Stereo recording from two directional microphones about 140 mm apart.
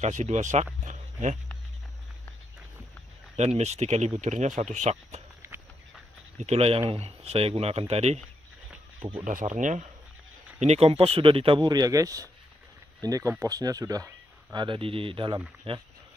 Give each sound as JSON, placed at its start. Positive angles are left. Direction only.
{"t": 0.0, "sound": "speech", "side_deg": -55}
{"t": 0.8, "sound": "a sound", "side_deg": -60}
{"t": 3.3, "sound": "speech", "side_deg": -50}
{"t": 5.4, "sound": "a sound", "side_deg": -20}
{"t": 6.3, "sound": "speech", "side_deg": -50}
{"t": 9.2, "sound": "speech", "side_deg": -65}
{"t": 10.6, "sound": "speech", "side_deg": -50}